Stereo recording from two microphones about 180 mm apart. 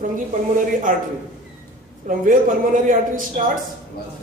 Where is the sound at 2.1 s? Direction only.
45° right (ahead or behind).